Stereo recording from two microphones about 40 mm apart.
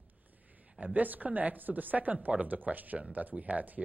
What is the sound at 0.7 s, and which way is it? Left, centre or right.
Speech, right.